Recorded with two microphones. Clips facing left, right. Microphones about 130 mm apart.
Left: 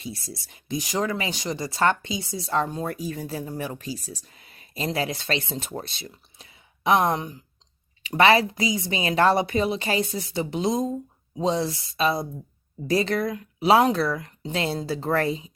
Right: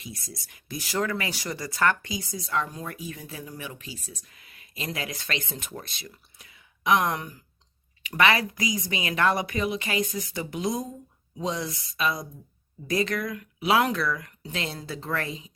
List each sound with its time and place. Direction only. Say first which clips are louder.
0.0 s speech: left 5 dB; 30° left (ahead or behind)